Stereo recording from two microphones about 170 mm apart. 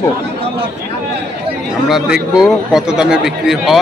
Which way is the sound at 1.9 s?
Centre (ahead or behind).